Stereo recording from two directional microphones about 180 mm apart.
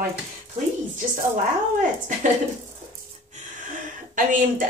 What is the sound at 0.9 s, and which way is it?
A woman's voice, 45° right (ahead or behind).